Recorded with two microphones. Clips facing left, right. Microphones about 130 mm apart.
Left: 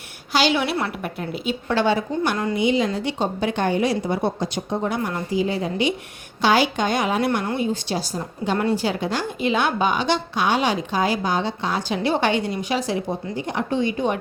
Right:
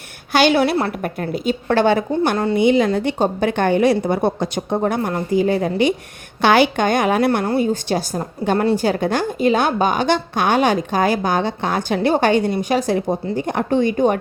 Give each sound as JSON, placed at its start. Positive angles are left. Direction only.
{"t": 0.3, "sound": "a woman's voice", "side_deg": -55}
{"t": 0.6, "sound": "a woman's voice", "side_deg": -40}
{"t": 6.4, "sound": "a woman's voice", "side_deg": -60}
{"t": 7.4, "sound": "a woman's voice", "side_deg": -40}